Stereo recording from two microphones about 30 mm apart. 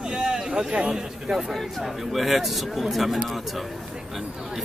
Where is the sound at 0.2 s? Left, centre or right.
Right.